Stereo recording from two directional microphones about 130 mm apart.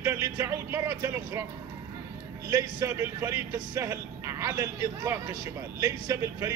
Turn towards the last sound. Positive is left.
turn(degrees=-20)  # may be behind; listen again after turning